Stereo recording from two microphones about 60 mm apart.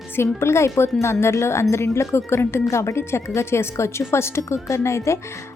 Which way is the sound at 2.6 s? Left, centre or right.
Left.